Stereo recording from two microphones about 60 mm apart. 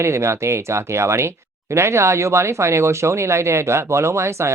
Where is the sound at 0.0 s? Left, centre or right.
Right.